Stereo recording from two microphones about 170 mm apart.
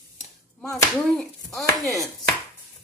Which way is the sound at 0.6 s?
Centre (ahead or behind).